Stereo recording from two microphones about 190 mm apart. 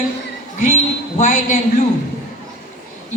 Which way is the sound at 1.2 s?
40° left (ahead or behind).